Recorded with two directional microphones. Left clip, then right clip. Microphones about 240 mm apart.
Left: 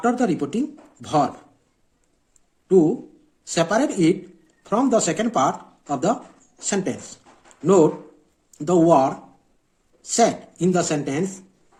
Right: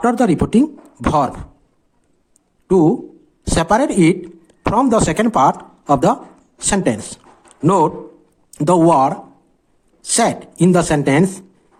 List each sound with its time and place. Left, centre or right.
0.0 s speech: right
2.6 s speech: right
10.2 s speech: right